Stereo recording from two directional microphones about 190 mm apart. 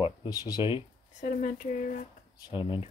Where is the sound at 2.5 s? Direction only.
25° left (ahead or behind).